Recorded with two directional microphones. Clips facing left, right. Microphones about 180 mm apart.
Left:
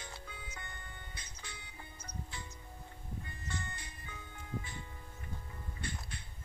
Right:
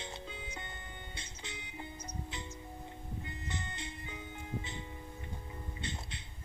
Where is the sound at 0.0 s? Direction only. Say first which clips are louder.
Right 5 dB; 20° right (ahead or behind).